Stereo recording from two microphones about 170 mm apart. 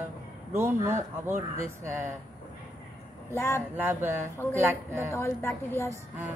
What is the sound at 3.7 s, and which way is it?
Speech, 10° right (ahead or behind).